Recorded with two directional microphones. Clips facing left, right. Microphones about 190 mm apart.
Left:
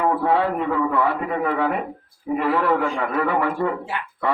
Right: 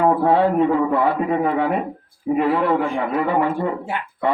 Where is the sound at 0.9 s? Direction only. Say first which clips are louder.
Right 3 dB; 30° right (ahead or behind).